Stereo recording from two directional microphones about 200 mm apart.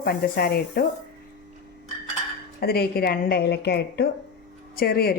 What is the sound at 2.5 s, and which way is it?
A woman's voice, 50° left (ahead or behind).